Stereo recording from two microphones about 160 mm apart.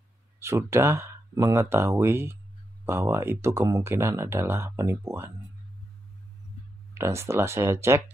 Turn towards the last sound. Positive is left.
turn(degrees=-15)  # may be behind; listen again after turning